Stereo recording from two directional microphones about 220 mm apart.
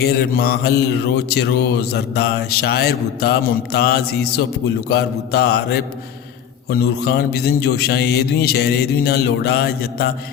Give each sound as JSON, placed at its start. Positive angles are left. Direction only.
{"t": 0.0, "sound": "mantra", "side_deg": 45}